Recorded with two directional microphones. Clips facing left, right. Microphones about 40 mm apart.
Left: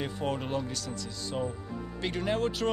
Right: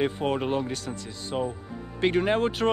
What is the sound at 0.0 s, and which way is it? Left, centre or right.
Speech, right.